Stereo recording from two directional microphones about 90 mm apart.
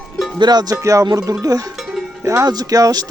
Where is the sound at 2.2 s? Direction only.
40° right (ahead or behind).